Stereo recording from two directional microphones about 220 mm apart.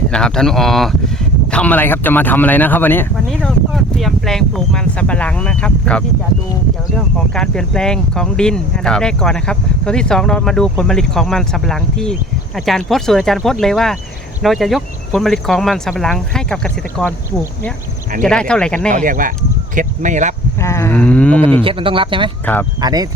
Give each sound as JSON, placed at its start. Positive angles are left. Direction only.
{"t": 0.1, "sound": "speech", "side_deg": 5}
{"t": 18.2, "sound": "speech", "side_deg": 5}
{"t": 18.9, "sound": "speech", "side_deg": -35}
{"t": 20.6, "sound": "speech", "side_deg": 15}
{"t": 21.6, "sound": "speech", "side_deg": -25}